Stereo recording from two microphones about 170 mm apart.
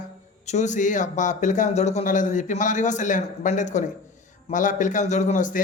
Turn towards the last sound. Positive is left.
turn(degrees=50)  # may be behind; listen again after turning